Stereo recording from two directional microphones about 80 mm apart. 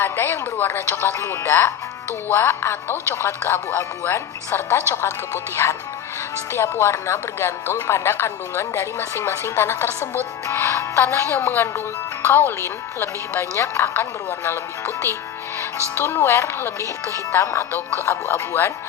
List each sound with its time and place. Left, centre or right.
0.0 s speech: left